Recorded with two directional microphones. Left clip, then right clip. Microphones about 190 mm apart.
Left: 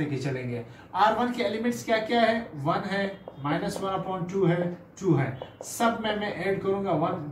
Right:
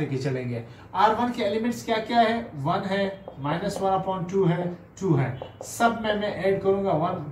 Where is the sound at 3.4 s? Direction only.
15° right (ahead or behind).